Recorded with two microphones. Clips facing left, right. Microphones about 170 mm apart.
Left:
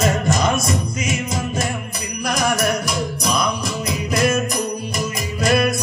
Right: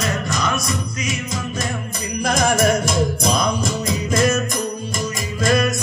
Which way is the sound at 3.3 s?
45° right (ahead or behind).